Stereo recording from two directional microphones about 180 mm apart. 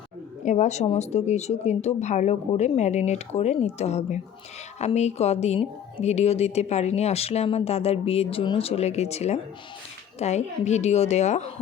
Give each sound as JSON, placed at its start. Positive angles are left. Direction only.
{"t": 0.4, "sound": "speech", "side_deg": 40}